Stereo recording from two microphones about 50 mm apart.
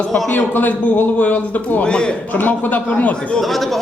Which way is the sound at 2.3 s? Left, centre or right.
Left.